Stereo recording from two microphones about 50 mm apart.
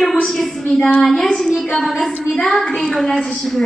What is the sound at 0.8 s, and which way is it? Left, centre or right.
Speech, left.